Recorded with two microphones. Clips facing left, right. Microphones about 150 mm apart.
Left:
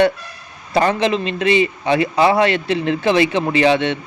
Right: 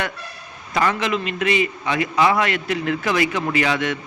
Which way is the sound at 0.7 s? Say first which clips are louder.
Left 5 dB; 30° left (ahead or behind).